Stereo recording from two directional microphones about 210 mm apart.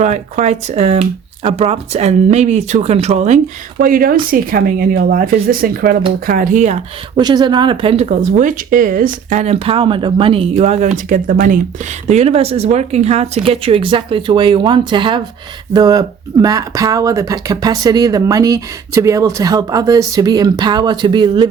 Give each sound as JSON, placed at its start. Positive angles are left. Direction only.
{"t": 0.0, "sound": "speech", "side_deg": -30}
{"t": 7.2, "sound": "speech", "side_deg": -20}